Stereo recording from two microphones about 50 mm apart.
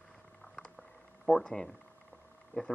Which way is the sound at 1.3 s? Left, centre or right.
Centre.